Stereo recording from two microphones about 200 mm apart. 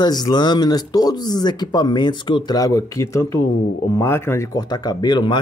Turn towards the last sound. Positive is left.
turn(degrees=20)  # may be behind; listen again after turning